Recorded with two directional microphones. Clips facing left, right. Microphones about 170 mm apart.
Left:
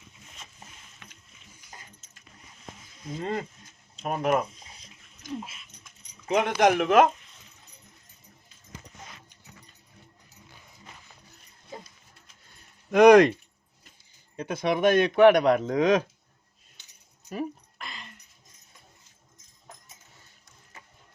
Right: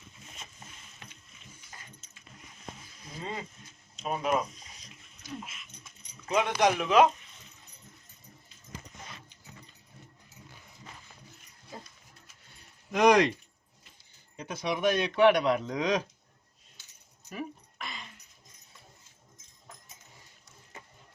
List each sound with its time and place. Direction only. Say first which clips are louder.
3.2 s speech: left 7 dB; 50° left (ahead or behind)
6.3 s speech: left 4 dB; 50° left (ahead or behind)
12.9 s speech: left 7 dB; 60° left (ahead or behind)
14.3 s speech: left 6 dB; 55° left (ahead or behind)
17.7 s a sound: even; centre (ahead or behind)